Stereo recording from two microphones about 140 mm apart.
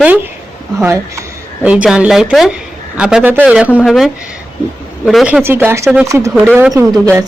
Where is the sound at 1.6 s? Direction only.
5° right (ahead or behind).